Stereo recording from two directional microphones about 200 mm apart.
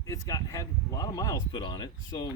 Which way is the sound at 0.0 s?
15° left (ahead or behind).